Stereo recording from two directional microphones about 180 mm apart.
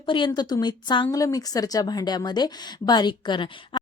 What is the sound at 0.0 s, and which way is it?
A woman's voice, 25° left (ahead or behind).